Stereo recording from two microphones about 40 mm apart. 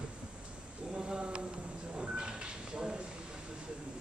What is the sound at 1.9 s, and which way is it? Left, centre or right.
Sliding door, right.